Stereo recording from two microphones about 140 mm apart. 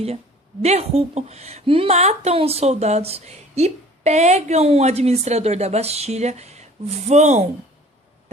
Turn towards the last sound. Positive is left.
turn(degrees=-55)  # may be behind; listen again after turning